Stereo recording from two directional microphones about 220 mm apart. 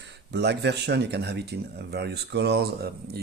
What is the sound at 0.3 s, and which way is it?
Speech, 50° right (ahead or behind).